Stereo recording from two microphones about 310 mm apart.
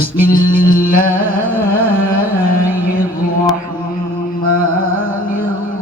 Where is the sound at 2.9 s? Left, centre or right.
Left.